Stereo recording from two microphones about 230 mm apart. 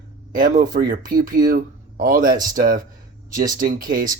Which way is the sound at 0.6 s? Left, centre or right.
Right.